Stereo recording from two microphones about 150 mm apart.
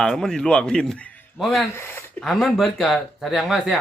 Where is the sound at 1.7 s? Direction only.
15° left (ahead or behind).